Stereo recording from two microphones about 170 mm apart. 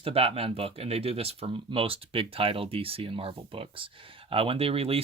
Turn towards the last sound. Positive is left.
turn(degrees=-35)  # may be behind; listen again after turning